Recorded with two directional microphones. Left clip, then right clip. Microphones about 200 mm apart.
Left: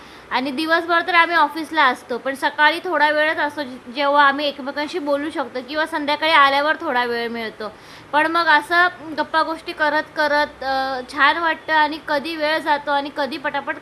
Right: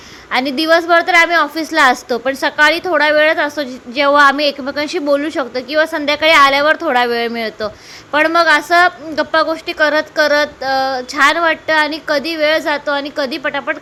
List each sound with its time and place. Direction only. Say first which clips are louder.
0.3 s a woman's voice: right 7 dB; 15° right (ahead or behind)